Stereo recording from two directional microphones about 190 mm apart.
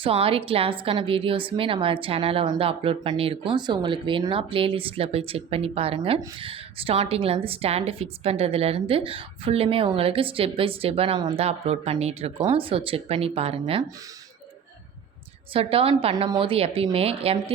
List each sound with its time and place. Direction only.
0.0 s a woman's voice: 30° right (ahead or behind)
15.5 s a woman's voice: 30° right (ahead or behind)